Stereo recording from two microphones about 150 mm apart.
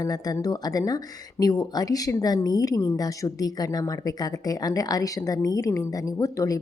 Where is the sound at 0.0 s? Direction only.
25° left (ahead or behind).